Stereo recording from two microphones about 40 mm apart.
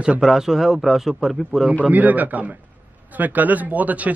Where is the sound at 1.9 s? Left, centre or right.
Right.